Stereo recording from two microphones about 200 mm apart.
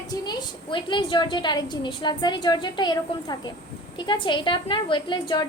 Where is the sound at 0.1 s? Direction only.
20° left (ahead or behind).